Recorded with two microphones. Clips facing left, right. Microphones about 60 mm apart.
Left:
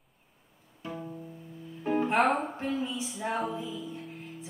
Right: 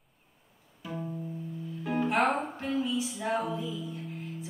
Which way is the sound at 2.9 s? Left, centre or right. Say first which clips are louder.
Right 3 dB; centre.